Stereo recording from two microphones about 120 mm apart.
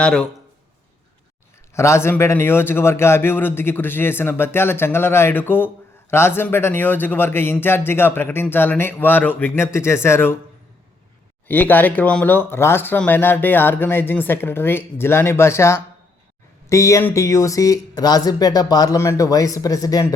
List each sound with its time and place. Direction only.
0.0 s speech: 10° left (ahead or behind)
1.7 s speech: 25° left (ahead or behind)
11.4 s speech: 15° left (ahead or behind)